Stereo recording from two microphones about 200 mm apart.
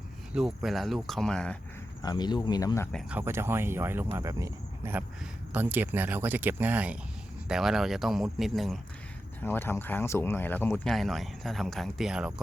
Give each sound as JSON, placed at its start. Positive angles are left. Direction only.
{"t": 0.3, "sound": "speech", "side_deg": 0}
{"t": 2.0, "sound": "cricket", "side_deg": 20}
{"t": 3.1, "sound": "speech", "side_deg": -10}
{"t": 9.4, "sound": "speech", "side_deg": 10}